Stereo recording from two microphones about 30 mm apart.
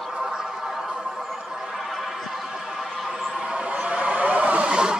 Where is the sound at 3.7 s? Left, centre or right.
Right.